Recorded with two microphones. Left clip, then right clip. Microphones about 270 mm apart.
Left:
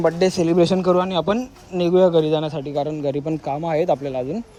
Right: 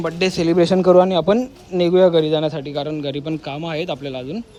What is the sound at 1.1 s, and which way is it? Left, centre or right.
Speech, centre.